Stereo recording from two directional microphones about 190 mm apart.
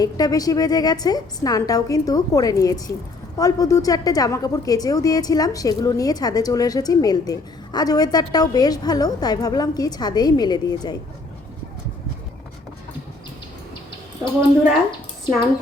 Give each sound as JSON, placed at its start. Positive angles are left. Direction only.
{"t": 0.0, "sound": "speech", "side_deg": 20}